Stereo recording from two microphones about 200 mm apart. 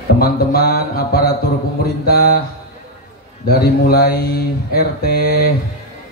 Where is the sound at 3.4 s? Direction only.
50° left (ahead or behind).